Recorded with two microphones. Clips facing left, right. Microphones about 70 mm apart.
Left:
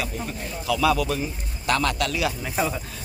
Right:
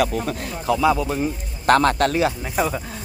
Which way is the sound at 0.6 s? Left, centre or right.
Right.